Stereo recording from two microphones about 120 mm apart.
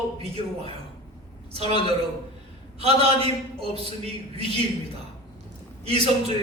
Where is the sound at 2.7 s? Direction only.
55° right (ahead or behind).